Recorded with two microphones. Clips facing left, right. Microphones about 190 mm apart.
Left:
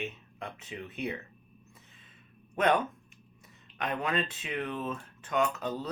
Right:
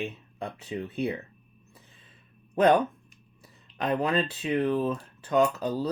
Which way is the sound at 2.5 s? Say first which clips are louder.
Right 6 dB; 35° right (ahead or behind).